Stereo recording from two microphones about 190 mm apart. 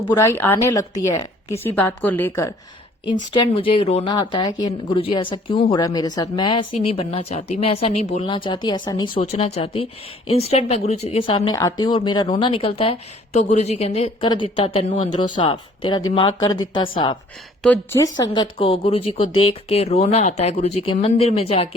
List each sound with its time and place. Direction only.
0.1 s a woman's voice: 15° left (ahead or behind)
3.3 s speech: 25° left (ahead or behind)
17.6 s a woman's voice: 10° left (ahead or behind)
18.0 s speech: 25° left (ahead or behind)